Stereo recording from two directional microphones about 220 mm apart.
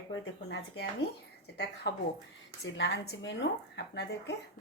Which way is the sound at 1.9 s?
50° left (ahead or behind).